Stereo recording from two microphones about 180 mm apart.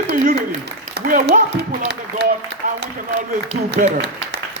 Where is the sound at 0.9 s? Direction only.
55° right (ahead or behind).